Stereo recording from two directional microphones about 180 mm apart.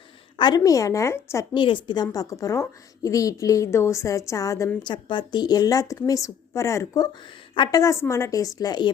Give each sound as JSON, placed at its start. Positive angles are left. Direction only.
{"t": 0.3, "sound": "a woman's voice", "side_deg": 25}
{"t": 1.5, "sound": "a woman's voice", "side_deg": 25}